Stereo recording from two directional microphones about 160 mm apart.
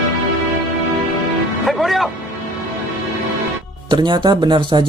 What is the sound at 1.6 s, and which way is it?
Music, centre (ahead or behind).